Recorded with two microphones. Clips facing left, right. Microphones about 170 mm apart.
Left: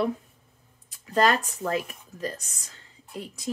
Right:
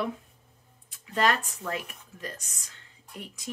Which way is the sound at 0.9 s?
35° left (ahead or behind).